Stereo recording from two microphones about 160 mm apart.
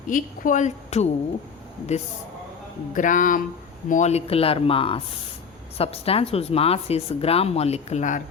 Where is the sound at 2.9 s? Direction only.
55° left (ahead or behind).